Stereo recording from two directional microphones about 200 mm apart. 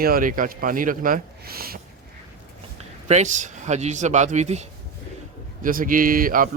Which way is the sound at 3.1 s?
35° right (ahead or behind).